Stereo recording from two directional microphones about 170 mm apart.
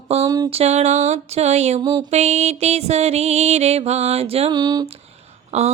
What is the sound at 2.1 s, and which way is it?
Music, 40° right (ahead or behind).